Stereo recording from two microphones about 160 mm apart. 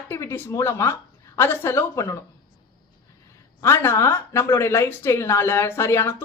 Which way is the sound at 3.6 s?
15° left (ahead or behind).